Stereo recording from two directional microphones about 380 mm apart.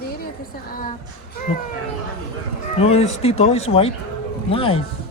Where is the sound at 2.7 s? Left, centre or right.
Centre.